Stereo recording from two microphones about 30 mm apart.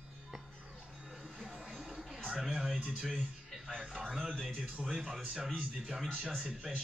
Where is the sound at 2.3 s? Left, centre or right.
Right.